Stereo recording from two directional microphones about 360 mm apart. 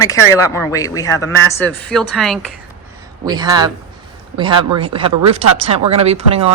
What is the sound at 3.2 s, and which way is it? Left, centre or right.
A woman's voice, centre.